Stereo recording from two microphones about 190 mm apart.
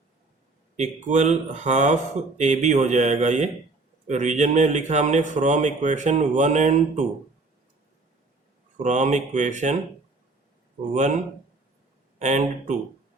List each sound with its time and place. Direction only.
0.8 s speech: 40° right (ahead or behind)
8.8 s speech: 40° right (ahead or behind)
10.9 s speech: 40° right (ahead or behind)
12.2 s speech: 40° right (ahead or behind)